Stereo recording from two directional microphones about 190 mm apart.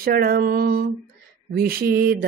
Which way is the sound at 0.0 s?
55° right (ahead or behind).